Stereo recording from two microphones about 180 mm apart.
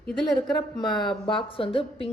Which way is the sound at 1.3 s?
30° left (ahead or behind).